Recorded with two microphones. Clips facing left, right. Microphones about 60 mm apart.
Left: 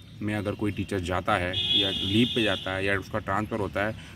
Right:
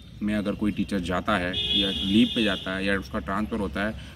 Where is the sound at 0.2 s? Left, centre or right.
Centre.